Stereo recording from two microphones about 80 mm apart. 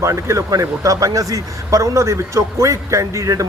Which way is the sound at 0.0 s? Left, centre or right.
Right.